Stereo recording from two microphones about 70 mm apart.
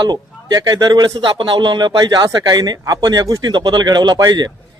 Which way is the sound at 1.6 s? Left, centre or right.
Right.